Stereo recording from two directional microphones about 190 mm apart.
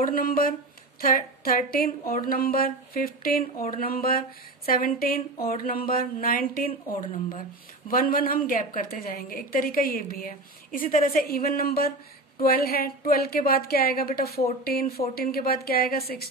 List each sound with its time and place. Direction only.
0.0 s a woman's voice: 50° left (ahead or behind)